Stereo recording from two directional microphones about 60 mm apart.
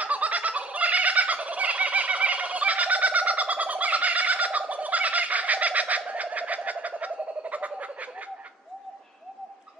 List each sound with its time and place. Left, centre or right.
0.0 s fowl: right